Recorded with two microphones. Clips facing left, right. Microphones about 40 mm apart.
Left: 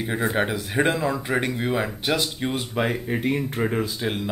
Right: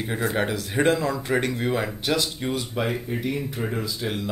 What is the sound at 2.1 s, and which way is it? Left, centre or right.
Speech, left.